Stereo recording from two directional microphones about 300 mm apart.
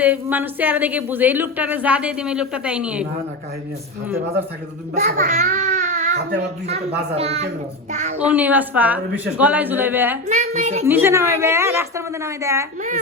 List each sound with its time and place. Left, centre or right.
0.0 s speech: centre
4.9 s a child's voice: right
7.2 s a woman's voice: right
8.2 s speech: centre
10.2 s a woman's voice: right
10.8 s a woman's voice: centre